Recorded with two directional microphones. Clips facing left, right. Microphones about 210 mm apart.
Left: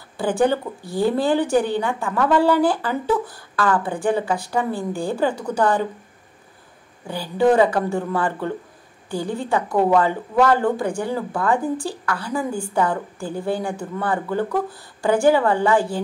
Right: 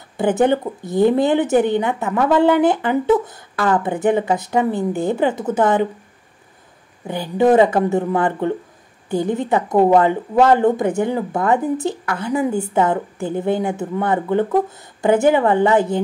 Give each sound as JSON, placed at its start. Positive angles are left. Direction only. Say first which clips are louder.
{"t": 0.2, "sound": "a woman's voice", "louder": "right 3 dB", "side_deg": -20}
{"t": 7.1, "sound": "a woman's voice", "louder": "right 3 dB", "side_deg": -20}